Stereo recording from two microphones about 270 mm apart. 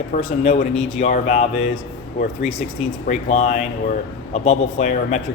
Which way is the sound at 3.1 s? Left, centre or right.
Left.